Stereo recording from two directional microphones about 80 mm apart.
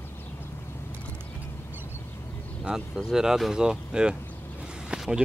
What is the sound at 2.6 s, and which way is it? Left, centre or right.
Speech, centre.